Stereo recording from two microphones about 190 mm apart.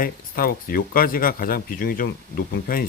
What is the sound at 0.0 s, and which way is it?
A man's voice, 50° left (ahead or behind).